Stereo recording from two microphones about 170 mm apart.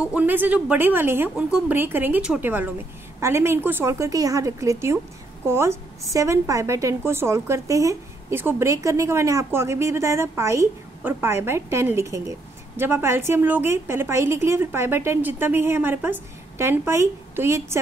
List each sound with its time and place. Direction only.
0.0 s a woman's voice: 10° right (ahead or behind)